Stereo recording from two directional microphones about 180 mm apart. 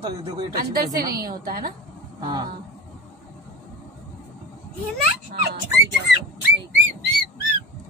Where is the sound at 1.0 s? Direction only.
55° right (ahead or behind).